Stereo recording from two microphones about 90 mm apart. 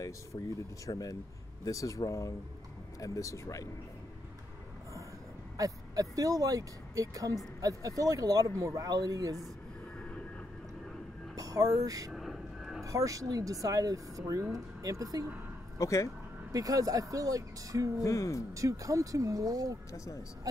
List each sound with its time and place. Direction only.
0.8 s speech: 40° left (ahead or behind)
5.6 s speech: 40° right (ahead or behind)
9.9 s vehicle: 15° left (ahead or behind)
11.3 s speech: 40° right (ahead or behind)
12.1 s a sound: centre (ahead or behind)
12.8 s speech: 40° right (ahead or behind)
15.8 s speech: 35° left (ahead or behind)
16.5 s speech: 40° right (ahead or behind)
18.0 s speech: 35° left (ahead or behind)
18.5 s speech: 40° right (ahead or behind)